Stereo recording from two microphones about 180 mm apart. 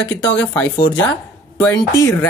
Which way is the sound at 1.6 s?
15° left (ahead or behind).